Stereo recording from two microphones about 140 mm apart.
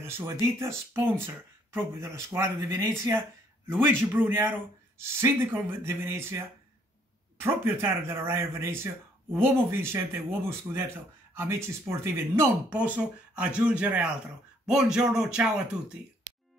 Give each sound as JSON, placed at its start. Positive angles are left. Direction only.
{"t": 0.0, "sound": "speech", "side_deg": -20}